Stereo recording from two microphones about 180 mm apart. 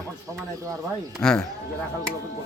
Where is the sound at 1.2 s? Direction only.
5° left (ahead or behind).